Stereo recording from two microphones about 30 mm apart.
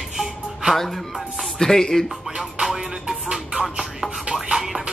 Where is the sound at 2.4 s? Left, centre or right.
Centre.